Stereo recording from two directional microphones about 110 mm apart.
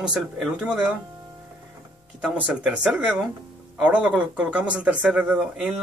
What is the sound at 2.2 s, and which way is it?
Speech, 10° right (ahead or behind).